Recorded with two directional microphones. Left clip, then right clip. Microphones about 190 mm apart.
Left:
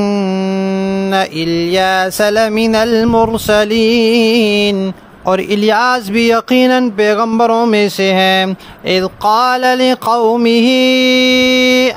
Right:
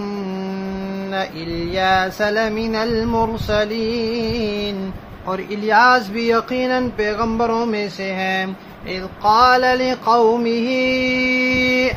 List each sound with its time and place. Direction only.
0.0 s mantra: 55° left (ahead or behind)
1.1 s music: 55° left (ahead or behind)